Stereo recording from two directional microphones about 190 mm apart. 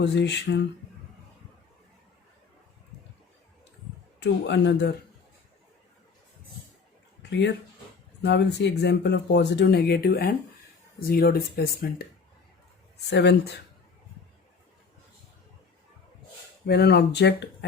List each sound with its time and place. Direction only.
0.0 s speech: 65° left (ahead or behind)
4.2 s speech: 65° left (ahead or behind)
7.2 s a sound: 65° left (ahead or behind)
8.2 s speech: 65° left (ahead or behind)
13.1 s speech: 65° left (ahead or behind)
16.6 s speech: 60° left (ahead or behind)